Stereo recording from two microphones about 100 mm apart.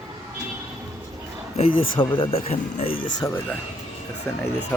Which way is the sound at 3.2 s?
40° left (ahead or behind).